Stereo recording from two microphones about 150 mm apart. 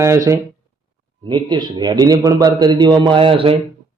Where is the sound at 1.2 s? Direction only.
30° right (ahead or behind).